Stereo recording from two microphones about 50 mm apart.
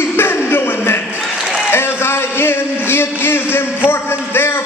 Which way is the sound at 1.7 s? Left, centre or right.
Left.